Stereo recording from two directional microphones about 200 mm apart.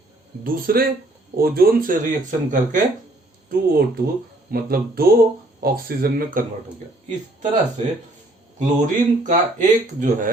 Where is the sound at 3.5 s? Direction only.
50° right (ahead or behind).